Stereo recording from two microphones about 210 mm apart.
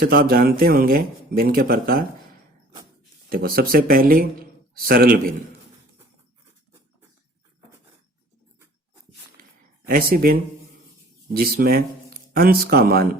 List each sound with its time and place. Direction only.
0.0 s speech: 45° right (ahead or behind)
3.2 s speech: 45° right (ahead or behind)
9.9 s speech: 45° right (ahead or behind)
11.3 s speech: 45° right (ahead or behind)